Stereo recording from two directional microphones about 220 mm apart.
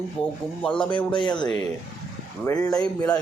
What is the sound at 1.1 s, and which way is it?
A man's voice, 20° left (ahead or behind).